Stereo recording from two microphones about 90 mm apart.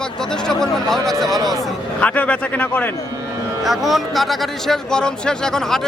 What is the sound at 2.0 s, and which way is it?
Speech, 15° left (ahead or behind).